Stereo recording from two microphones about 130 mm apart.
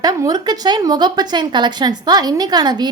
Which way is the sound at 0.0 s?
30° right (ahead or behind).